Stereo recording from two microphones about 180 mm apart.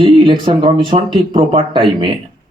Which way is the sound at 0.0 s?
25° right (ahead or behind).